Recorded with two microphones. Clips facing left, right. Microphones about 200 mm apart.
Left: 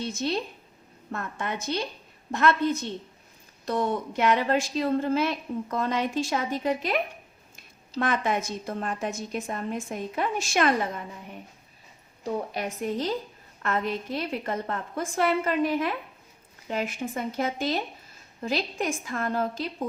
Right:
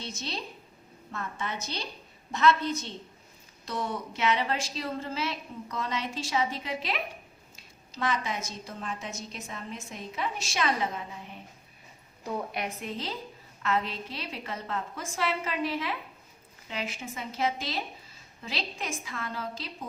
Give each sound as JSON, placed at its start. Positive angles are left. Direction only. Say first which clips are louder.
{"t": 0.0, "sound": "a woman's voice", "louder": "left 9 dB", "side_deg": 55}
{"t": 12.5, "sound": "a woman's voice", "louder": "left 6 dB", "side_deg": 45}